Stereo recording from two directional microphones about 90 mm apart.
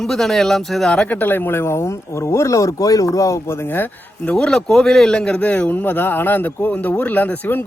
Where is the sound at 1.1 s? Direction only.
20° left (ahead or behind); by 3.3 s 40° left (ahead or behind).